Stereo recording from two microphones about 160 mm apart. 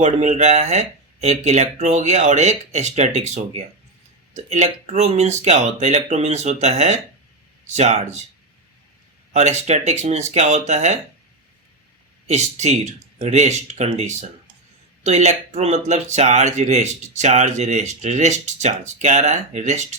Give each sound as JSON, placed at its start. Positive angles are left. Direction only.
{"t": 0.0, "sound": "speech", "side_deg": -45}
{"t": 9.3, "sound": "speech", "side_deg": -45}
{"t": 12.3, "sound": "speech", "side_deg": -45}